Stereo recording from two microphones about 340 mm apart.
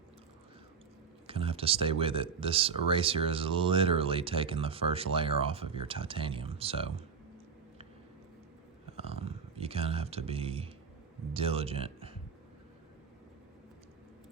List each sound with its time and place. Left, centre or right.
1.3 s speech: centre
9.0 s a sound: centre
11.3 s speech: centre